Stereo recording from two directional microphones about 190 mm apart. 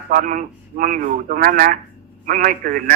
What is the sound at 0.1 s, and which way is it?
A man's voice, 45° right (ahead or behind).